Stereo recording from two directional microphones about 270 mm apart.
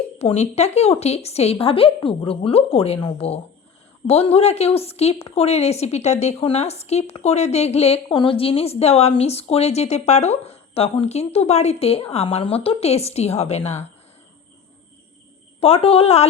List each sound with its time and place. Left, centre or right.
0.2 s a woman's voice: left
15.6 s a woman's voice: left